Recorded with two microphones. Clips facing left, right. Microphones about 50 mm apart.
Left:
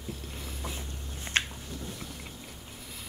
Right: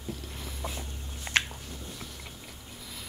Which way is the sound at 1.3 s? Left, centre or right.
Right.